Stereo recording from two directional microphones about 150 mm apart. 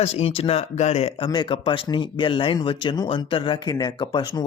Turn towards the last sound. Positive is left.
turn(degrees=30)  # may be behind; listen again after turning